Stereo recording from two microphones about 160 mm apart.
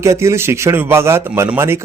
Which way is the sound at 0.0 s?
20° right (ahead or behind).